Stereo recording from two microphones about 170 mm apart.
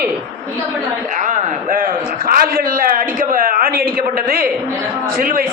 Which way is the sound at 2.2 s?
60° right (ahead or behind).